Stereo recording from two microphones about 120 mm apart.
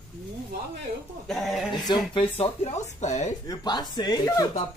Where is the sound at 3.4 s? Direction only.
35° left (ahead or behind).